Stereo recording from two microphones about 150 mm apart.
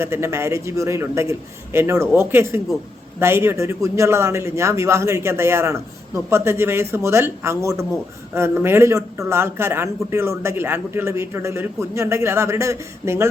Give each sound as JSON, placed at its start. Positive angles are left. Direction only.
{"t": 0.0, "sound": "speech", "side_deg": -20}